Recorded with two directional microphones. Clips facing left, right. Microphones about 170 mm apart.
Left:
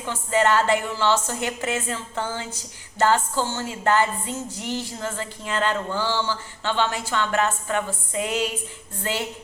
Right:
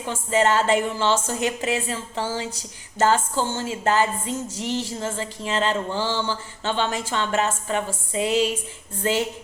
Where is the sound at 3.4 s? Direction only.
15° right (ahead or behind).